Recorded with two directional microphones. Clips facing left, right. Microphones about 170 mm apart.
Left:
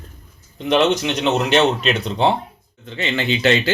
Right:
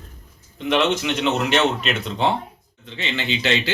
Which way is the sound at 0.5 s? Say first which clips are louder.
Left 3 dB; 35° left (ahead or behind).